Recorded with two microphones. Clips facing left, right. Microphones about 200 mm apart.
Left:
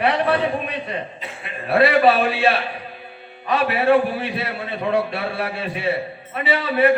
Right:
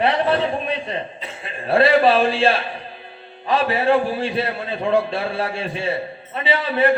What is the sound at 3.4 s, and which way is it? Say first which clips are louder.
A man's voice: even; 30° right (ahead or behind).